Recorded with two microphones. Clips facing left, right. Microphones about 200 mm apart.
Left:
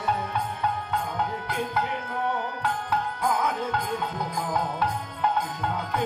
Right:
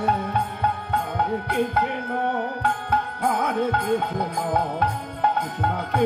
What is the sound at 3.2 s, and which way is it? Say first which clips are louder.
Music: right 5 dB; 60° right (ahead or behind).